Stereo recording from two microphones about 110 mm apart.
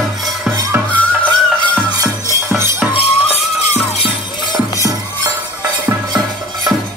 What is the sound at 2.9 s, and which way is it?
Music, 65° left (ahead or behind).